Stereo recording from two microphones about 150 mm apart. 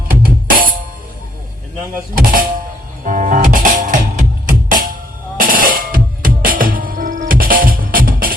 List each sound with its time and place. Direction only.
0.1 s drum: 70° right (ahead or behind)
2.1 s music: 65° right (ahead or behind)